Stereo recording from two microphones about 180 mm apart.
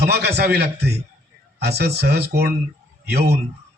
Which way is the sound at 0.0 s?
65° right (ahead or behind).